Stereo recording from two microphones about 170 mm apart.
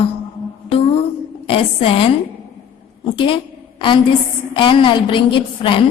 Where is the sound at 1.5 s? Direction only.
35° left (ahead or behind).